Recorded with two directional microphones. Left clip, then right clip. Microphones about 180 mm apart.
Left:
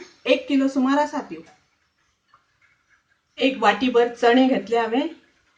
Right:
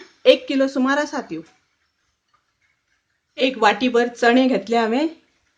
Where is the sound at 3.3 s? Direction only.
60° right (ahead or behind).